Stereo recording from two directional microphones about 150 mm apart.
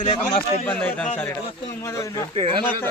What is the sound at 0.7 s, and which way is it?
A man's voice, 10° left (ahead or behind).